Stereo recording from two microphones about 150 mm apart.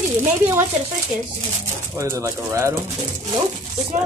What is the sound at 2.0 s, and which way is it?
Speech, 20° right (ahead or behind).